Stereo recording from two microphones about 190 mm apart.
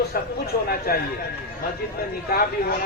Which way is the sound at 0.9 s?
50° left (ahead or behind).